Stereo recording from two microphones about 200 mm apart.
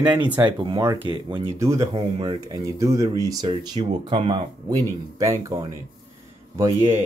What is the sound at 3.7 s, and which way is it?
Speech, 30° right (ahead or behind).